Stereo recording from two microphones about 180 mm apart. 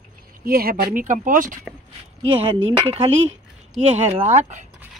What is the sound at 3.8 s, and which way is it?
Speech, 35° right (ahead or behind).